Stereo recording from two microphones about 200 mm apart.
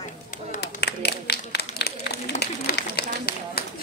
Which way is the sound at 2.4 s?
55° left (ahead or behind).